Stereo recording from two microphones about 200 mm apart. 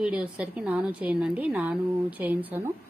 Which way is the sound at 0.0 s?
5° right (ahead or behind).